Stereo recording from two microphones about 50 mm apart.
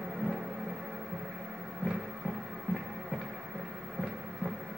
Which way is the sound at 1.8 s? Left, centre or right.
Centre.